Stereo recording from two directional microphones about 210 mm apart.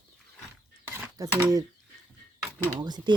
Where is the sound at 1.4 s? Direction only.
15° right (ahead or behind).